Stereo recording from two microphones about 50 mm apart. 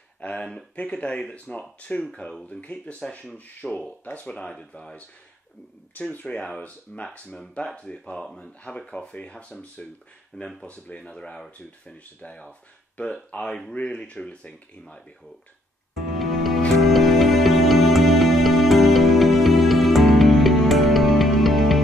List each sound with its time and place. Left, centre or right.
0.4 s speech: centre
0.7 s speech: left
3.6 s speech: centre
4.0 s speech: left
4.3 s speech: centre
6.0 s speech: left
15.9 s music: centre